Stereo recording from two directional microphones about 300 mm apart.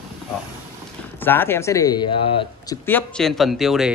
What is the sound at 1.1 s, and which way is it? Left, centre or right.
Speech, centre.